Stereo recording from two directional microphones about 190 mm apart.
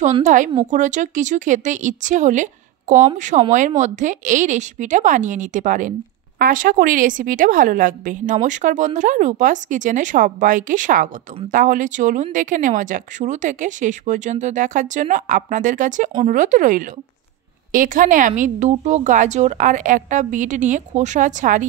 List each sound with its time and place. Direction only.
0.0 s a woman's voice: 40° right (ahead or behind)